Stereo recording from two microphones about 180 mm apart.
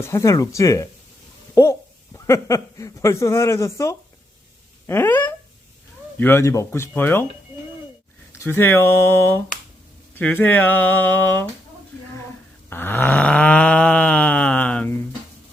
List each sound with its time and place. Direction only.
0.0 s speech: 15° left (ahead or behind)
8.3 s speech: 15° left (ahead or behind)
12.7 s a sound: 10° left (ahead or behind)